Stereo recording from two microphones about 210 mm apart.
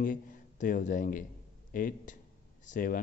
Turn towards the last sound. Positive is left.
turn(degrees=40)  # may be behind; listen again after turning